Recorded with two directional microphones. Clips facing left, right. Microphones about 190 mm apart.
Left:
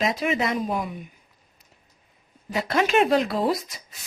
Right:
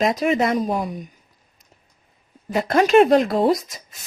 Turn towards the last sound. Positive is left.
turn(degrees=-45)  # may be behind; listen again after turning